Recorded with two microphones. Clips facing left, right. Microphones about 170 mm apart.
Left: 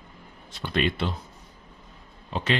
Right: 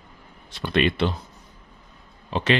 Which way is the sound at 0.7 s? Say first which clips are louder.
Right 4 dB; 75° right (ahead or behind).